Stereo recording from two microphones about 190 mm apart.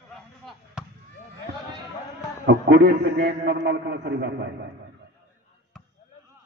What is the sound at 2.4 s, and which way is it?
A man's voice, 70° right (ahead or behind).